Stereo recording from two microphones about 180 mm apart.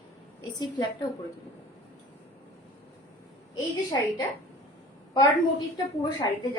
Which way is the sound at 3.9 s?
20° left (ahead or behind).